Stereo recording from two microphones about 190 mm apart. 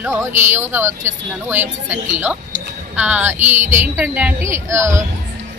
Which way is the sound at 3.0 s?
10° right (ahead or behind).